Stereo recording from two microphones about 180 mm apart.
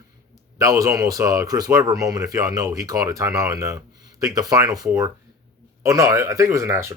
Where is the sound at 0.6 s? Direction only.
15° right (ahead or behind).